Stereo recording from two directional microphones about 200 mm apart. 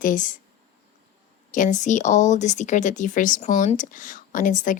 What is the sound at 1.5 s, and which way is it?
Speech, 40° left (ahead or behind).